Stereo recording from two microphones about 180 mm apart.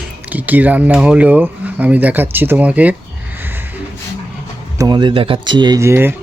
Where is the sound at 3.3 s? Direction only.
10° right (ahead or behind).